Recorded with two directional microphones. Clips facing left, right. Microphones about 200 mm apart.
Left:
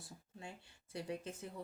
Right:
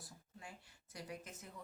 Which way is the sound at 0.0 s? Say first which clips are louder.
Left 4 dB; 25° left (ahead or behind).